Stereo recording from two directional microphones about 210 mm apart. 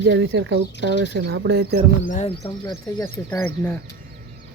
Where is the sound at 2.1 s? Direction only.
30° left (ahead or behind).